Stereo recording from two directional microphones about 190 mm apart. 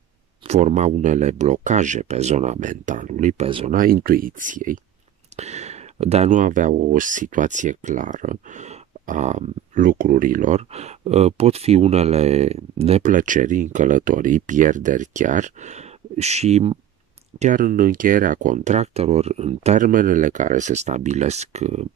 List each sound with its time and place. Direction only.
0.5 s speech: 40° right (ahead or behind)
3.4 s speech: 25° right (ahead or behind)
3.7 s speech: 50° right (ahead or behind)